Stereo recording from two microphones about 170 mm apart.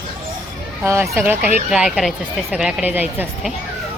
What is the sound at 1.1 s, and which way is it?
Speech, 15° right (ahead or behind).